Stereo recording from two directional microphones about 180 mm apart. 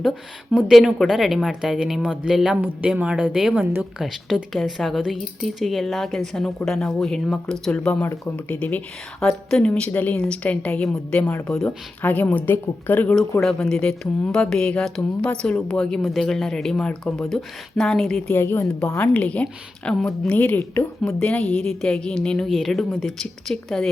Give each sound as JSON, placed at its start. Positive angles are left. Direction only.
{"t": 0.5, "sound": "a woman's voice", "side_deg": -5}